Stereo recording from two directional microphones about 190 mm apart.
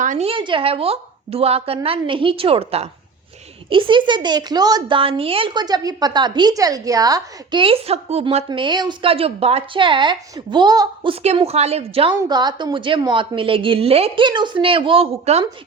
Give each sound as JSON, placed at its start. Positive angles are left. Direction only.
{"t": 0.0, "sound": "speech", "side_deg": -35}
{"t": 8.4, "sound": "speech", "side_deg": -25}